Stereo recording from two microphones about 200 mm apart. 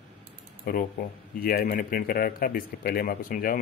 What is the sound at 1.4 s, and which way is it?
Speech, 45° left (ahead or behind).